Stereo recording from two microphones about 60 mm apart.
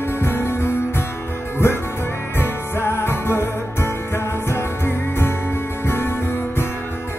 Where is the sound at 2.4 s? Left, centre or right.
Left.